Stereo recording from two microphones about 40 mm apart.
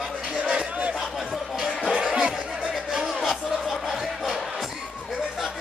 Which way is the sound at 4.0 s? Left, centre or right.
Centre.